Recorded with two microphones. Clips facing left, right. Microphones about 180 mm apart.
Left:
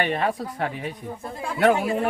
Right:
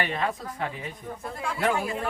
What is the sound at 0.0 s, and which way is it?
Speech, 60° left (ahead or behind).